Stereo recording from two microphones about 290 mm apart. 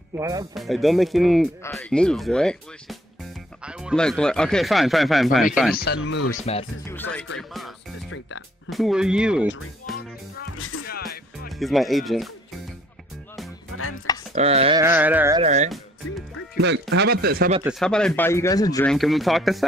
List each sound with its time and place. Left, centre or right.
0.2 s speech: centre
0.6 s speech: centre
6.5 s speech: left
6.9 s speech: centre
7.3 s music: centre
8.6 s speech: centre
10.5 s music: left
10.9 s music: left
11.4 s speech: centre
13.7 s chopping: left
14.3 s speech: right
15.4 s speech: right
16.5 s speech: right
17.6 s speech: centre